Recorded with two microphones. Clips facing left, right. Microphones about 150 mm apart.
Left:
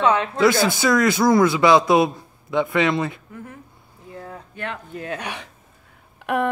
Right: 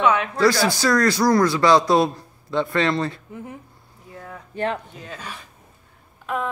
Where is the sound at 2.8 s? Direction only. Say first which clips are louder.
Left 1 dB; 5° left (ahead or behind).